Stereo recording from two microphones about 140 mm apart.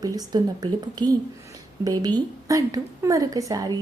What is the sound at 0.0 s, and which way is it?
A woman's voice, 25° right (ahead or behind).